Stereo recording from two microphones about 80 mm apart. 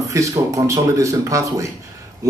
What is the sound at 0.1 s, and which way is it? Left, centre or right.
A man's voice, right.